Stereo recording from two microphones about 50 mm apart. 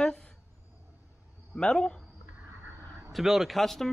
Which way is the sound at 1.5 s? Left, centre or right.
Centre.